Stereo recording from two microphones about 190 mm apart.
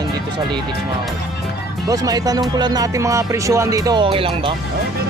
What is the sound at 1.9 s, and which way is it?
Music, 20° right (ahead or behind).